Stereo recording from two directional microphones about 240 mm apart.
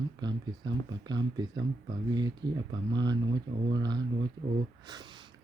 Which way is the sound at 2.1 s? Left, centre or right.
Centre.